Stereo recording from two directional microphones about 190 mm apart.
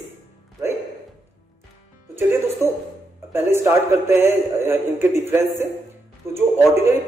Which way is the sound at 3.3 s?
10° right (ahead or behind).